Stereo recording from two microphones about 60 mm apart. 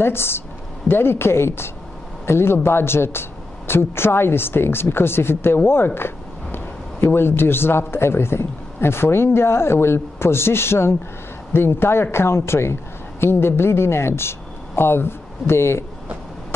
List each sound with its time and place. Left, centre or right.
0.0 s speech: left